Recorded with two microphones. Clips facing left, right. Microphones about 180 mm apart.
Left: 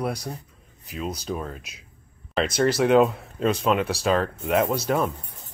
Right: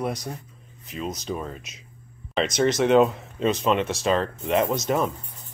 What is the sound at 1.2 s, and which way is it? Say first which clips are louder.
Speech: even; centre (ahead or behind).